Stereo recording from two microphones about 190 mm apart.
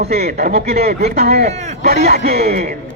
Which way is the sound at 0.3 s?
55° right (ahead or behind).